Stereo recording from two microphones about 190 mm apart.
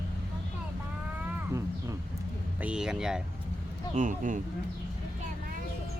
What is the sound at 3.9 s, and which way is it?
Speech, 40° right (ahead or behind).